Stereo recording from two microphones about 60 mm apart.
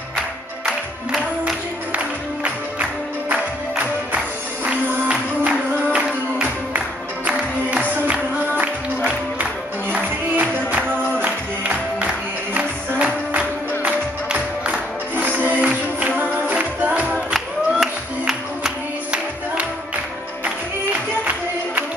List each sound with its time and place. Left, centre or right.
2.0 s music: right
5.4 s music: right
7.2 s music: right
17.3 s music: centre
20.4 s music: right